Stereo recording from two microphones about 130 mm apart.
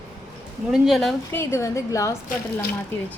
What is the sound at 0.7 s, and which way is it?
Speech, centre (ahead or behind).